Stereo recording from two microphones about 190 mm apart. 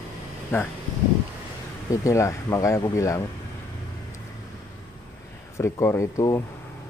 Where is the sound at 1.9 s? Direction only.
15° left (ahead or behind).